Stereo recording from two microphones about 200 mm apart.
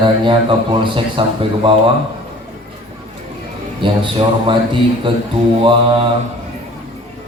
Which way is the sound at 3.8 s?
25° right (ahead or behind).